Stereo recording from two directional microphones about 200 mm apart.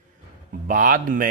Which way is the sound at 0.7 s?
45° right (ahead or behind).